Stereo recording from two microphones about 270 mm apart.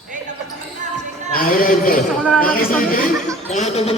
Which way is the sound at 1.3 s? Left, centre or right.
Left.